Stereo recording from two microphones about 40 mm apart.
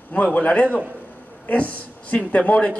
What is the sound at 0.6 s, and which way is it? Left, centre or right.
Speech, right.